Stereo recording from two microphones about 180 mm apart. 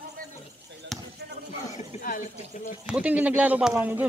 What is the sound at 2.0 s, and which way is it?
Speech, 45° left (ahead or behind).